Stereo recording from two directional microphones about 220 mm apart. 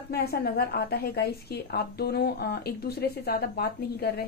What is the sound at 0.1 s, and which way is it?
A woman's voice, 45° left (ahead or behind).